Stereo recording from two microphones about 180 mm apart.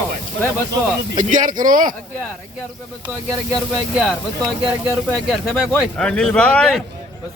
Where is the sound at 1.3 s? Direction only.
45° right (ahead or behind).